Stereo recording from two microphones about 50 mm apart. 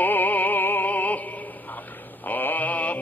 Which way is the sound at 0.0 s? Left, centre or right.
Left.